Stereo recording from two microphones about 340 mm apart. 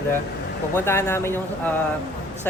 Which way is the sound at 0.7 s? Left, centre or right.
Centre.